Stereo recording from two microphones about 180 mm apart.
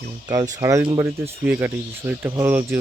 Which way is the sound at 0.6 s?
15° right (ahead or behind).